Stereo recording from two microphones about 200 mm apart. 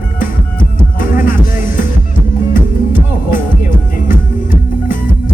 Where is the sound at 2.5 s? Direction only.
40° left (ahead or behind).